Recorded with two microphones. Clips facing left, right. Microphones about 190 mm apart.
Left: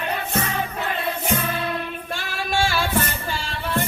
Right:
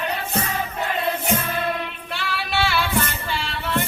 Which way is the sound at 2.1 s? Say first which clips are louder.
Even; 45° left (ahead or behind).